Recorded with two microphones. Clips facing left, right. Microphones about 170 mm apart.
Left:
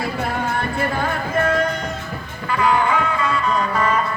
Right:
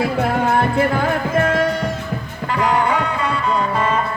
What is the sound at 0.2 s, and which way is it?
Music, 65° right (ahead or behind).